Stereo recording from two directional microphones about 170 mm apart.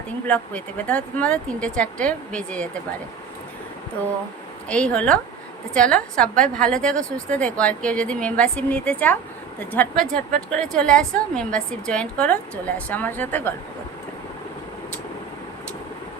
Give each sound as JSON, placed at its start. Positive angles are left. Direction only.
{"t": 0.3, "sound": "a woman's voice", "side_deg": 10}
{"t": 4.7, "sound": "a woman's voice", "side_deg": 5}